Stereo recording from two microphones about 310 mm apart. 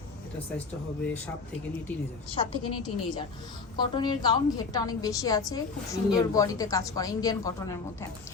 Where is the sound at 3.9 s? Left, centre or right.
Centre.